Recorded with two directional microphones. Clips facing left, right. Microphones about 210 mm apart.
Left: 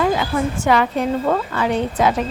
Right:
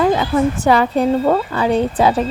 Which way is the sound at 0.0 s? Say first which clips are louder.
Right 4 dB; 35° right (ahead or behind).